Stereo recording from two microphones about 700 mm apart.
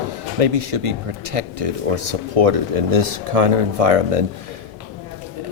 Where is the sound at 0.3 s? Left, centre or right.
Right.